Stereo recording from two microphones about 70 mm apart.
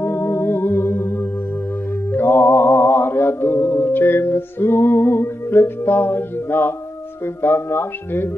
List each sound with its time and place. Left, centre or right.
0.0 s music: left
7.4 s speech: left